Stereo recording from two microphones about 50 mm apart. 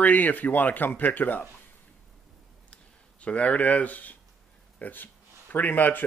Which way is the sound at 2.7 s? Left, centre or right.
Left.